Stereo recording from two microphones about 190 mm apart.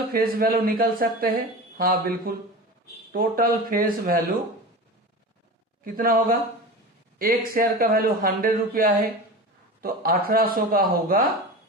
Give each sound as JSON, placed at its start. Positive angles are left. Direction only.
{"t": 0.1, "sound": "speech", "side_deg": -50}
{"t": 5.8, "sound": "speech", "side_deg": -50}